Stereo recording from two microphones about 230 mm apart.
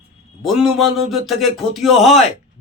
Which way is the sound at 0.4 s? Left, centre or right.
Centre.